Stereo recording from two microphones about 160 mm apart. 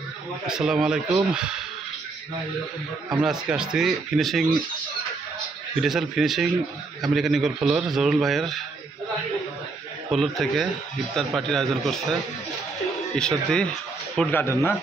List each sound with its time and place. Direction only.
0.5 s a man's voice: 5° right (ahead or behind)
3.1 s a man's voice: 5° right (ahead or behind)
5.8 s a man's voice: centre (ahead or behind)
10.0 s a man's voice: centre (ahead or behind)